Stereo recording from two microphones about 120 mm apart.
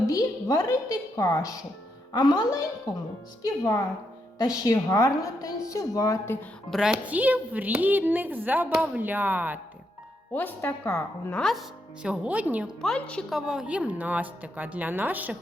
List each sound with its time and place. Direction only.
0.1 s a woman's voice: 30° left (ahead or behind)
6.7 s a woman's voice: 5° right (ahead or behind)
10.3 s a woman's voice: 15° left (ahead or behind)
11.3 s a woman's voice: centre (ahead or behind)
12.0 s a woman's voice: 10° right (ahead or behind)
12.8 s a woman's voice: 5° left (ahead or behind)
13.5 s a woman's voice: 5° right (ahead or behind)